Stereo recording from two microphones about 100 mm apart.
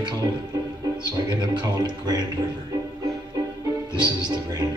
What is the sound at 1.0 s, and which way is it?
Speech, 45° right (ahead or behind).